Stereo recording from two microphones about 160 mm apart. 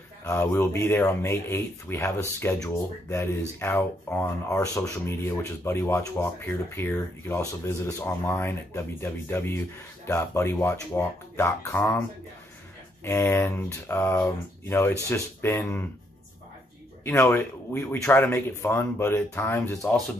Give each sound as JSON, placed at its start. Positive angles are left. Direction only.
{"t": 0.2, "sound": "speech", "side_deg": 15}
{"t": 13.0, "sound": "speech", "side_deg": 15}
{"t": 17.0, "sound": "speech", "side_deg": 15}